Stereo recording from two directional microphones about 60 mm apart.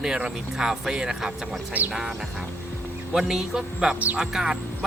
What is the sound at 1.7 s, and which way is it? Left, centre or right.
Speech, right.